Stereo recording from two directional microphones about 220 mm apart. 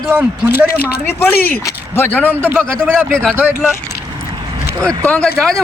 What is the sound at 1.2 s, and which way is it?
A man's voice, 10° left (ahead or behind).